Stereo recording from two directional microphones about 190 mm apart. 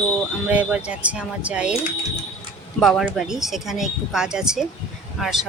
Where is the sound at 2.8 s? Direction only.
Centre (ahead or behind).